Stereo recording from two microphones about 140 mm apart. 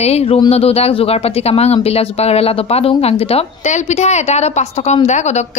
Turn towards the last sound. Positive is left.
turn(degrees=55)  # may be behind; listen again after turning